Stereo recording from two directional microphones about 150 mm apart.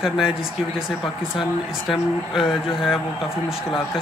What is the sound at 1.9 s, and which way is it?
Speech, centre (ahead or behind).